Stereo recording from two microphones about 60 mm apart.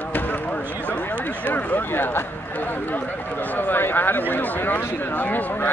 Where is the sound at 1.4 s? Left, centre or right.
Left.